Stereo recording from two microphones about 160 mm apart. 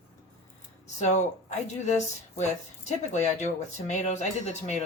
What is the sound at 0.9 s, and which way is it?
Speech, 45° left (ahead or behind).